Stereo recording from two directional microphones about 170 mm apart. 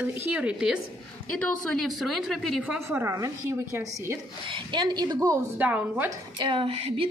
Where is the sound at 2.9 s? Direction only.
15° right (ahead or behind).